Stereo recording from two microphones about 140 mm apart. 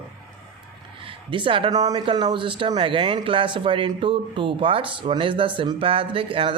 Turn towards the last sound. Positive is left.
turn(degrees=-40)  # may be behind; listen again after turning